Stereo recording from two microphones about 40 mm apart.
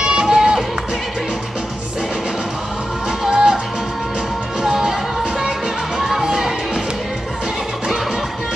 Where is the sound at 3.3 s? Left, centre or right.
Centre.